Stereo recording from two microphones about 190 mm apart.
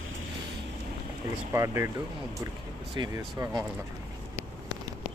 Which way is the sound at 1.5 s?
15° right (ahead or behind).